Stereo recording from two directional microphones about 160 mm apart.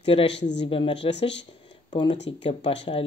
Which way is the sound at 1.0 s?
90° left.